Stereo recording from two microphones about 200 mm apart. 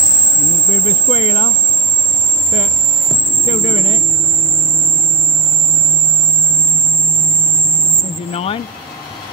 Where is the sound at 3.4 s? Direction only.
30° left (ahead or behind).